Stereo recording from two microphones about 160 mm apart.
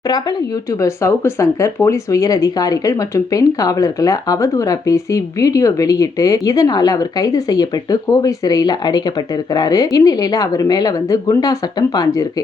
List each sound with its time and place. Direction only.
0.1 s speech: 25° left (ahead or behind)